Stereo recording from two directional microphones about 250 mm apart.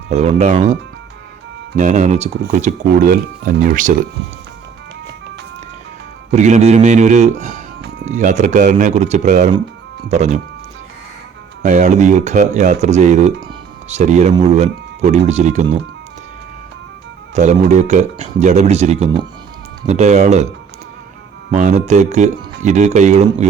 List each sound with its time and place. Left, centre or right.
0.1 s speech: right
6.3 s speech: right
11.6 s speech: right
17.3 s speech: right
21.5 s speech: right